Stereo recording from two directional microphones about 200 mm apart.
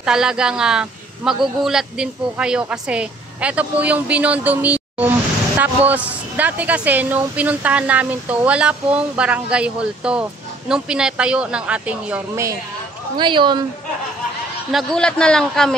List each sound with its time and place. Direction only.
0.0 s speech: 5° right (ahead or behind)
13.2 s speech: 25° right (ahead or behind)
14.7 s speech: centre (ahead or behind)